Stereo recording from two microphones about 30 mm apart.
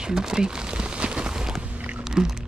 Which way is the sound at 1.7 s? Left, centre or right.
Right.